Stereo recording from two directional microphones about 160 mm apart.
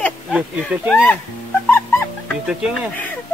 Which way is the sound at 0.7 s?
5° right (ahead or behind).